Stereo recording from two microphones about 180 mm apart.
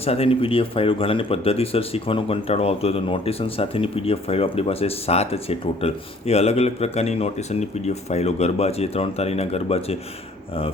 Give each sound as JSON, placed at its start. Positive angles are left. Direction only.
{"t": 0.0, "sound": "speech", "side_deg": 35}